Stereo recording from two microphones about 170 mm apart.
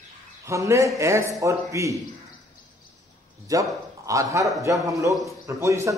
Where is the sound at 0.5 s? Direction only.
15° right (ahead or behind).